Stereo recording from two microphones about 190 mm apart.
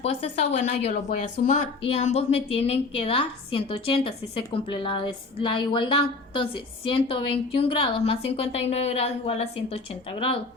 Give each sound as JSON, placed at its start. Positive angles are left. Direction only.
{"t": 0.0, "sound": "a woman's voice", "side_deg": 30}